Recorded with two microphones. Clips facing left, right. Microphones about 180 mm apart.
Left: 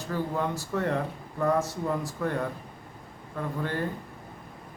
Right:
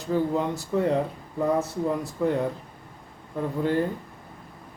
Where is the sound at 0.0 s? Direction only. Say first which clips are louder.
Right 5 dB; 20° right (ahead or behind).